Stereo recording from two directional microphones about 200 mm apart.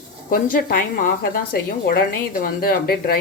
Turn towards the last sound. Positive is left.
turn(degrees=50)  # may be behind; listen again after turning